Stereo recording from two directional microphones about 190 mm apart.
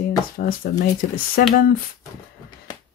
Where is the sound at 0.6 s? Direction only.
50° left (ahead or behind).